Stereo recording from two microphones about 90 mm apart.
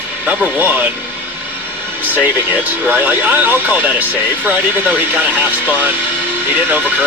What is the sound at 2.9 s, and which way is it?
Speech, 20° right (ahead or behind).